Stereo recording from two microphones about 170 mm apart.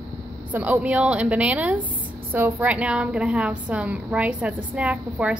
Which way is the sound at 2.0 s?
55° right (ahead or behind).